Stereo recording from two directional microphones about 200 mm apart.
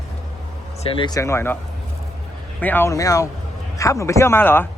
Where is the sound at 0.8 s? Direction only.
20° left (ahead or behind).